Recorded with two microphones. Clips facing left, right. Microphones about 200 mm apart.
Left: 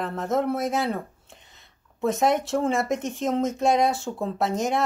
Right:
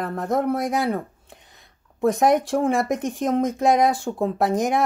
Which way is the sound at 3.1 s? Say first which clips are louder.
Right 3 dB; 55° right (ahead or behind).